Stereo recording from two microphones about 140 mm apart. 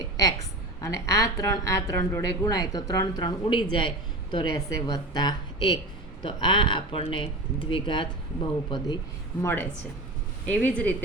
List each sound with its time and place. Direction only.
0.0 s a woman's voice: 25° left (ahead or behind)
9.4 s speech: 15° left (ahead or behind)